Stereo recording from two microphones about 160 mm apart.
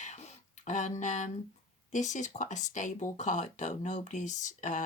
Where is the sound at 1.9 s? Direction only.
50° left (ahead or behind).